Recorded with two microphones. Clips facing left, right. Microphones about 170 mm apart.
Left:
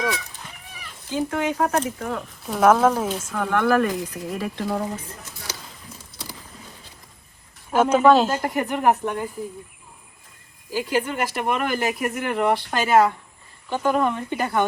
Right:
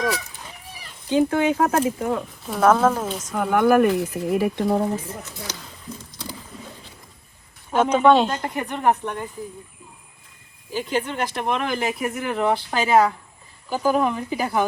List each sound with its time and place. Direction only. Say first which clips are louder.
1.1 s speech: right 5 dB; 25° right (ahead or behind)
2.5 s speech: left 1 dB; centre (ahead or behind)
3.3 s speech: right 3 dB; 10° right (ahead or behind)
7.7 s speech: even; 5° left (ahead or behind)
10.7 s speech: left 1 dB; 5° left (ahead or behind)